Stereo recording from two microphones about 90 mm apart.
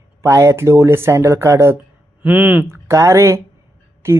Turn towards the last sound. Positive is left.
turn(degrees=-25)  # may be behind; listen again after turning